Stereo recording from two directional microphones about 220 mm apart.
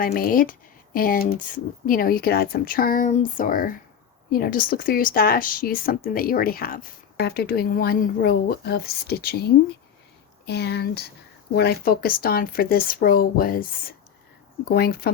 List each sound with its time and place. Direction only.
0.0 s speech: 40° left (ahead or behind)